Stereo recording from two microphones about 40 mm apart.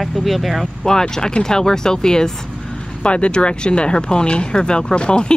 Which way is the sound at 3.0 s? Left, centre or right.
Left.